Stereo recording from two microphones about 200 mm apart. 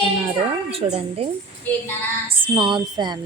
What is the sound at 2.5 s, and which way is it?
Speech, 25° right (ahead or behind).